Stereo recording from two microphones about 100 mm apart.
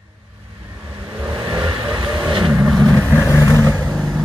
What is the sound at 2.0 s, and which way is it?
Vehicle, 50° right (ahead or behind).